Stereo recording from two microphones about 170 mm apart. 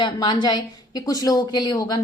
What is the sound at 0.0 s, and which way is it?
A woman's voice, 25° left (ahead or behind).